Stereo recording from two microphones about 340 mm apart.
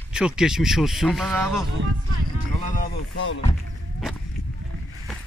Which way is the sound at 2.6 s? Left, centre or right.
Left.